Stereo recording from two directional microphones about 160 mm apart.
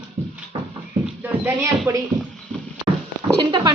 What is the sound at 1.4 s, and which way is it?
Speech, 15° right (ahead or behind).